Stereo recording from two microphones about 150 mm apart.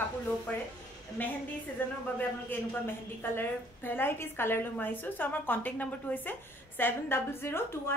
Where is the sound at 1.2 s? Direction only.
15° left (ahead or behind).